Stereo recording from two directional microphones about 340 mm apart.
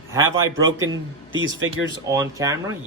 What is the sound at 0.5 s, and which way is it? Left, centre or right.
Speech, right.